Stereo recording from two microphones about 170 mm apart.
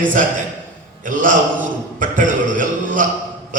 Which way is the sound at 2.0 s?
50° right (ahead or behind).